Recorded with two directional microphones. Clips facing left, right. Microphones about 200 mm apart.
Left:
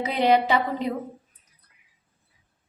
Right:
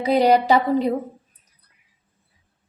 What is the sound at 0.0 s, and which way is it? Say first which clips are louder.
Speech: right 4 dB; 40° right (ahead or behind).